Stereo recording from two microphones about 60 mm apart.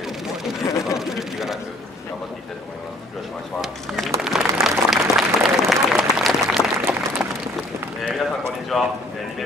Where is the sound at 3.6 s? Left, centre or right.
Centre.